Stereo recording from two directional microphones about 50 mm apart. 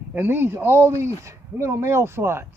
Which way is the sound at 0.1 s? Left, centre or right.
Right.